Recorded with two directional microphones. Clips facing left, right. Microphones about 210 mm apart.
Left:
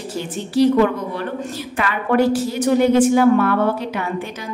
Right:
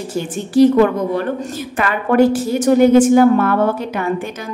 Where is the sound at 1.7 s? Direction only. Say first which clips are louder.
Right 3 dB; 50° right (ahead or behind).